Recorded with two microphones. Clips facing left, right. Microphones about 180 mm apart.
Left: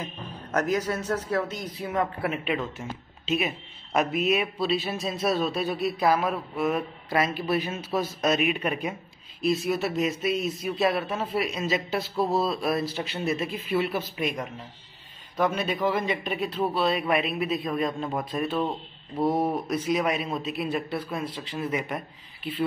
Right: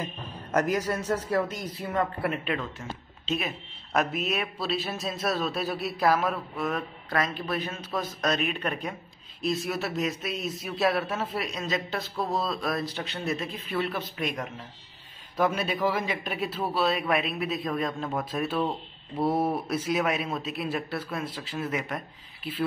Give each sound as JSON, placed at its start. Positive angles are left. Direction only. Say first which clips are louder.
{"t": 0.0, "sound": "a man's voice", "louder": "even", "side_deg": -10}
{"t": 1.7, "sound": "a man's voice", "louder": "left 1 dB", "side_deg": 5}